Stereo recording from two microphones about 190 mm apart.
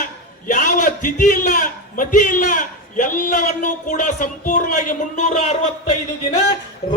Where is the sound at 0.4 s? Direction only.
45° left (ahead or behind).